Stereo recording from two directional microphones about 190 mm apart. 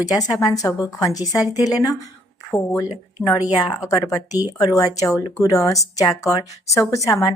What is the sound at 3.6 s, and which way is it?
Speech, 20° left (ahead or behind).